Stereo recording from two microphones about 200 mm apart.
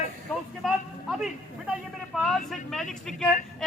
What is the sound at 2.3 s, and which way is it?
Speech, centre (ahead or behind).